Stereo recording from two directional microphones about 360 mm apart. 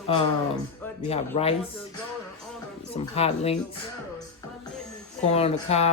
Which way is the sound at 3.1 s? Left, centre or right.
Centre.